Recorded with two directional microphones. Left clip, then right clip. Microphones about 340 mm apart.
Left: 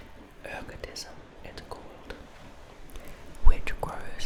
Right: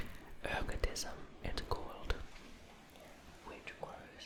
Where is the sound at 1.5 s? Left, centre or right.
Right.